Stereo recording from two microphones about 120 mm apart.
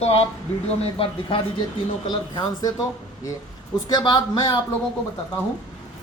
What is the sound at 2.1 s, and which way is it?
Speech, 35° left (ahead or behind).